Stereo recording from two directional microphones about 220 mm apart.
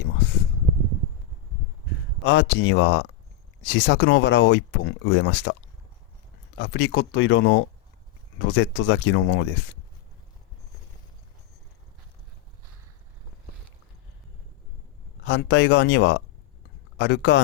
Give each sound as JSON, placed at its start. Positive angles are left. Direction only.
{"t": 2.2, "sound": "speech", "side_deg": 55}
{"t": 6.6, "sound": "speech", "side_deg": 55}
{"t": 15.2, "sound": "speech", "side_deg": 55}